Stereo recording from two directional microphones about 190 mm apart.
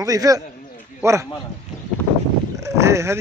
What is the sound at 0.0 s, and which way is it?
A man's voice, 20° right (ahead or behind).